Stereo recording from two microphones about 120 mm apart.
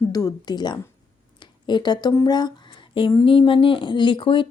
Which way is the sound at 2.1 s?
35° left (ahead or behind).